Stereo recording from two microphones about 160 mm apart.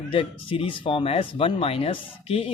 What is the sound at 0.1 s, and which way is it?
Speech, 35° left (ahead or behind).